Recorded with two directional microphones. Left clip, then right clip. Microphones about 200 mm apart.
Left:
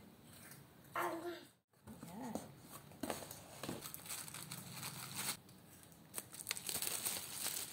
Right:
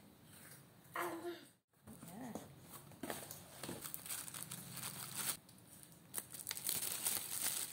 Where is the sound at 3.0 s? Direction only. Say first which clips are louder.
Left 3 dB; 10° left (ahead or behind).